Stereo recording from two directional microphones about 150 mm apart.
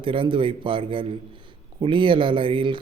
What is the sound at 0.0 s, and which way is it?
Speech, 35° right (ahead or behind).